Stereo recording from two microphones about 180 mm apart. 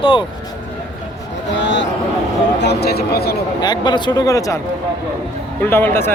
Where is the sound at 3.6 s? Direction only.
25° left (ahead or behind).